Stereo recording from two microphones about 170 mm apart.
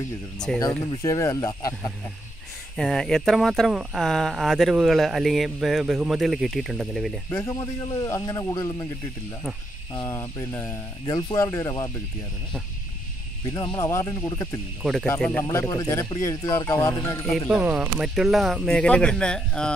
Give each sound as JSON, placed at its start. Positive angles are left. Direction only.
{"t": 1.0, "sound": "speech", "side_deg": 20}
{"t": 2.8, "sound": "speech", "side_deg": 0}
{"t": 7.2, "sound": "speech", "side_deg": 20}
{"t": 9.9, "sound": "speech", "side_deg": 20}
{"t": 13.5, "sound": "speech", "side_deg": 25}
{"t": 14.8, "sound": "speech", "side_deg": 0}
{"t": 15.7, "sound": "speech", "side_deg": 20}
{"t": 17.5, "sound": "speech", "side_deg": -5}